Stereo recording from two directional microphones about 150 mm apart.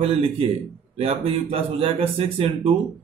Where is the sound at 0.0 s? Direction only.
40° right (ahead or behind).